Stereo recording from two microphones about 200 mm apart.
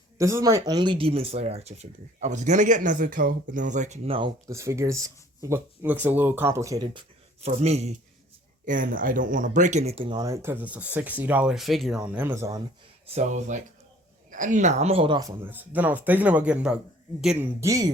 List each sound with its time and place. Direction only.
0.2 s speech: 15° right (ahead or behind); by 4.3 s 30° right (ahead or behind)
4.4 s speech: 15° right (ahead or behind)
7.4 s speech: 35° right (ahead or behind); by 12.6 s 15° right (ahead or behind)
13.1 s speech: 35° right (ahead or behind)
15.4 s speech: 10° right (ahead or behind)
17.6 s speech: 15° right (ahead or behind)